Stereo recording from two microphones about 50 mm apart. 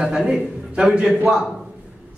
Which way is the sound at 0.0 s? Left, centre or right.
Centre.